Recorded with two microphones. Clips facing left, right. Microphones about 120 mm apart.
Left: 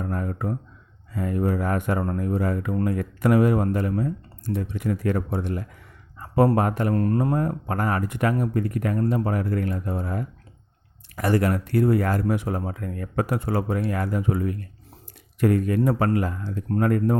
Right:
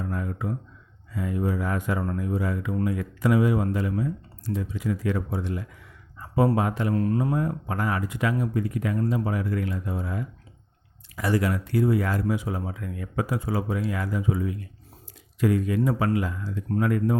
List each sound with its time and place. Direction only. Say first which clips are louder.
0.0 s speech: left 2 dB; 45° left (ahead or behind)
13.2 s speech: left 2 dB; 65° left (ahead or behind); by 17.2 s 50° left (ahead or behind)